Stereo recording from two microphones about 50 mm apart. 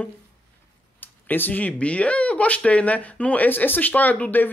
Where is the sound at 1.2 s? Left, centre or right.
Left.